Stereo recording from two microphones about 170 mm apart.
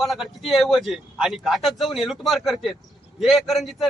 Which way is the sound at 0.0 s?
Centre (ahead or behind).